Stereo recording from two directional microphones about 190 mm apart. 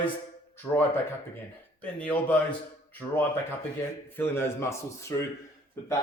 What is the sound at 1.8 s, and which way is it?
Speech, 5° left (ahead or behind).